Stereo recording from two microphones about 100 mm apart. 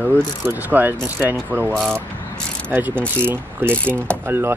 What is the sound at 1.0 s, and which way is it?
Speech, 20° right (ahead or behind).